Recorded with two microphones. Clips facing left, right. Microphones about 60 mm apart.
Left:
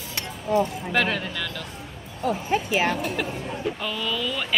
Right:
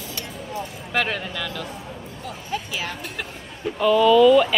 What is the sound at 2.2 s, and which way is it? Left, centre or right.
Speech, left.